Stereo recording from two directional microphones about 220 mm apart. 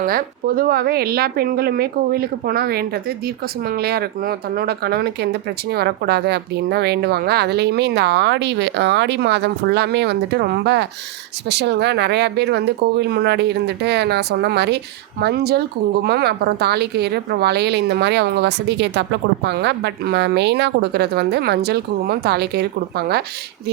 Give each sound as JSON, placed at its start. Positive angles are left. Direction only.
{"t": 0.0, "sound": "a woman's voice", "side_deg": -40}